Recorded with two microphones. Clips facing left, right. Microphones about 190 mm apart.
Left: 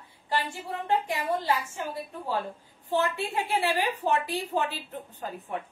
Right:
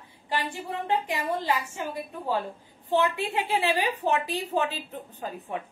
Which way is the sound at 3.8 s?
15° right (ahead or behind).